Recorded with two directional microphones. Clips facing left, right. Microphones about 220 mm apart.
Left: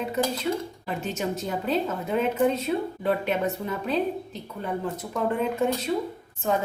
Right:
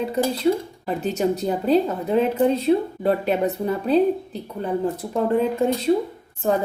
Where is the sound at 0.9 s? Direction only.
35° right (ahead or behind).